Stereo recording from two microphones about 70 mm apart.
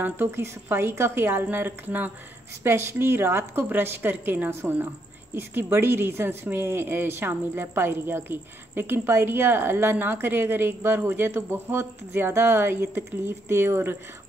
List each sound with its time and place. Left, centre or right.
0.0 s a woman's voice: right